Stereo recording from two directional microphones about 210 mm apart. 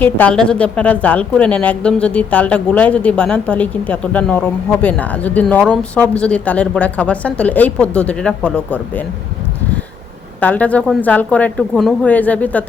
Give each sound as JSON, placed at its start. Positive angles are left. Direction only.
{"t": 0.0, "sound": "a woman's voice", "side_deg": 5}
{"t": 10.4, "sound": "a woman's voice", "side_deg": 5}